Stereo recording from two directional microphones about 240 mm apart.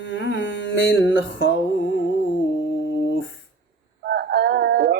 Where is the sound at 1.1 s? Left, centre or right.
Left.